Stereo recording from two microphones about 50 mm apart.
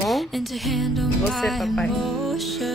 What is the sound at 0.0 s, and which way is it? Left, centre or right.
Speech, centre.